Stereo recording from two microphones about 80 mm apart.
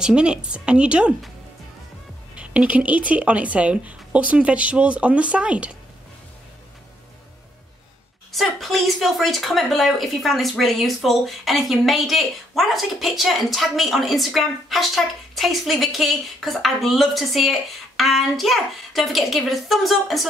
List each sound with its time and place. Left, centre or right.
0.0 s speech: centre
2.3 s speech: centre
8.3 s speech: centre